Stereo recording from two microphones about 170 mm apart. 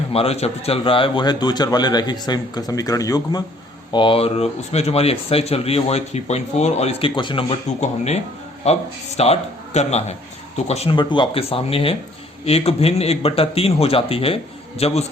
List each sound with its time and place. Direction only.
0.1 s a man's voice: 35° left (ahead or behind); by 3.4 s 20° left (ahead or behind)
3.9 s speech: 30° left (ahead or behind)
7.8 s speech: 40° left (ahead or behind)